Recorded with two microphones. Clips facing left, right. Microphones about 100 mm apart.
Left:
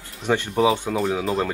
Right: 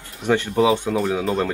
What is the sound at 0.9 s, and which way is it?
Speech, centre (ahead or behind).